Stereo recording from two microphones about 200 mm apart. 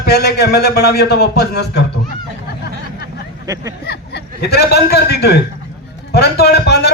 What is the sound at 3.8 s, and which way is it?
A man's voice, 55° left (ahead or behind).